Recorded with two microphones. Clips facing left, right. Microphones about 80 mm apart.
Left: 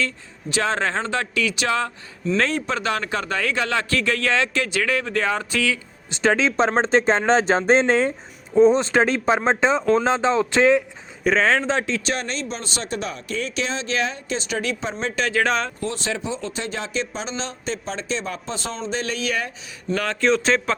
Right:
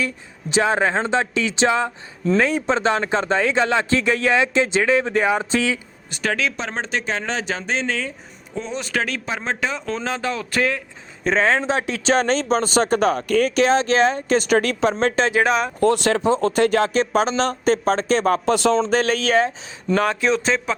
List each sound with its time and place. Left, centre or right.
0.5 s speech: centre
2.4 s speech: centre
2.6 s speech: right
6.1 s speech: left
9.8 s speech: centre
11.3 s speech: centre
12.0 s speech: right
12.9 s speech: right
14.8 s speech: right
15.3 s speech: centre
15.8 s speech: right
18.9 s speech: right
20.2 s speech: centre